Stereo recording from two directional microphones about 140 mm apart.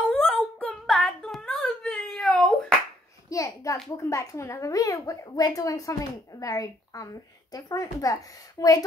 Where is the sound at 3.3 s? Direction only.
25° left (ahead or behind).